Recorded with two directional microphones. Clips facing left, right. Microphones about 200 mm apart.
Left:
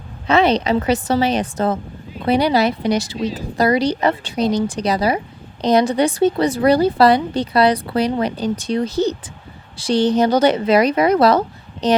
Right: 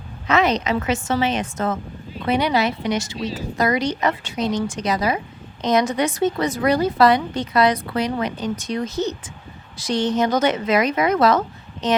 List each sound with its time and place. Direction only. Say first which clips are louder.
0.3 s speech: left 4 dB; 30° left (ahead or behind)